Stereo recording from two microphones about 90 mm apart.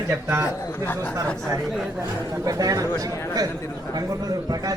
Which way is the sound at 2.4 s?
40° right (ahead or behind).